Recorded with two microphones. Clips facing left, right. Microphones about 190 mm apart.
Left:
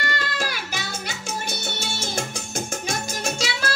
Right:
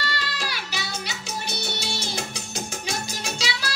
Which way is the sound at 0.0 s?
50° left (ahead or behind).